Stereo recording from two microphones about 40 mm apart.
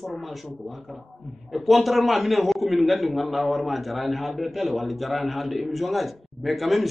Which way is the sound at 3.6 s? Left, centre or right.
Centre.